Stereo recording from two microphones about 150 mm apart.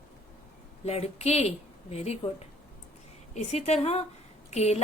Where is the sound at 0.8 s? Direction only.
45° left (ahead or behind).